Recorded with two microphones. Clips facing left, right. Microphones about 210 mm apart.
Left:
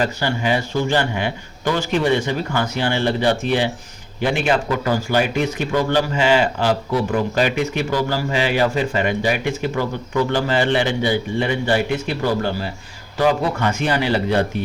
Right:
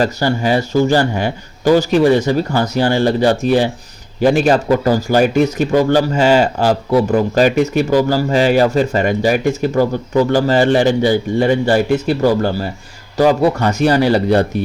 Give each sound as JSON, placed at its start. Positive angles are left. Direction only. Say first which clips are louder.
{"t": 0.0, "sound": "speech", "louder": "right 5 dB", "side_deg": -40}